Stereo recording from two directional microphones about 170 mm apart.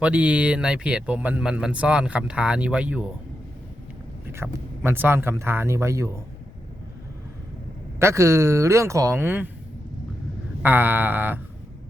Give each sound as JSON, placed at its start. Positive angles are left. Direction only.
{"t": 0.0, "sound": "speech", "side_deg": -5}
{"t": 4.3, "sound": "speech", "side_deg": -15}
{"t": 7.9, "sound": "speech", "side_deg": -15}
{"t": 10.6, "sound": "speech", "side_deg": -10}